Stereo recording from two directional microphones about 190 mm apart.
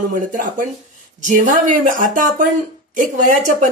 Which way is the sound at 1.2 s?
40° right (ahead or behind).